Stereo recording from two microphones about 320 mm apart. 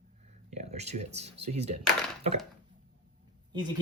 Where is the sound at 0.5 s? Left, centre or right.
Centre.